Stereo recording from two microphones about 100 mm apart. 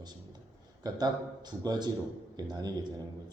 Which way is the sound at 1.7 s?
45° right (ahead or behind).